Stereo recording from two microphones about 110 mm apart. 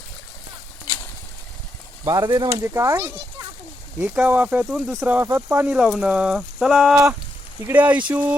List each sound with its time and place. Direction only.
2.0 s speech: 40° right (ahead or behind)
2.5 s speech: 20° right (ahead or behind)
4.0 s speech: 10° right (ahead or behind)